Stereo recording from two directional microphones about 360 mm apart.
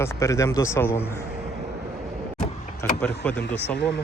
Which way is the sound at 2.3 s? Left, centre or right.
Centre.